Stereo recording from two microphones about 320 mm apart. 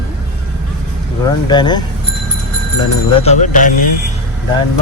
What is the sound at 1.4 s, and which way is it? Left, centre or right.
Speech, centre.